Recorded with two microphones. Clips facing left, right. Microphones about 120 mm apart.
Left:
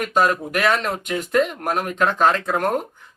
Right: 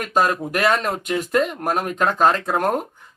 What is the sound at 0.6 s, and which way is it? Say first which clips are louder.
Speech: right 1 dB; 40° right (ahead or behind).